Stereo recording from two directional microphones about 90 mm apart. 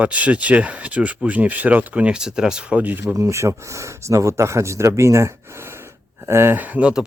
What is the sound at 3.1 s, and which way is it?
Speech, 35° right (ahead or behind).